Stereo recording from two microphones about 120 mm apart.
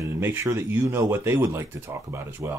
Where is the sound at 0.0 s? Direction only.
20° right (ahead or behind).